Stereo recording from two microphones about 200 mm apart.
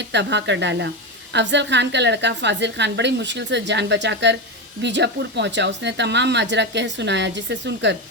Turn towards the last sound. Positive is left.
turn(degrees=-60)  # may be behind; listen again after turning